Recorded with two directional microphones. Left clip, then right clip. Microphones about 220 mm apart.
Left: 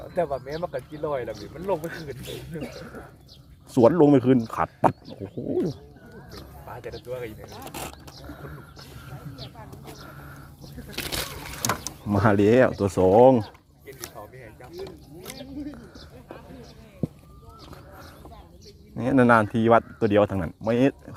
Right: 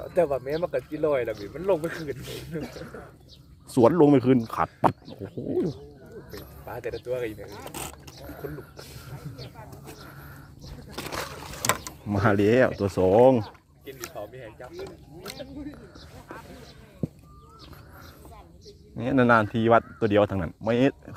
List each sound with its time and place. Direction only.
0.1 s speech: 50° right (ahead or behind)
3.7 s speech: centre (ahead or behind)
6.7 s speech: 50° right (ahead or behind)
9.8 s a sound: centre (ahead or behind)
10.9 s a sound: 15° left (ahead or behind)
11.8 s speech: 10° left (ahead or behind)
18.9 s speech: 10° left (ahead or behind)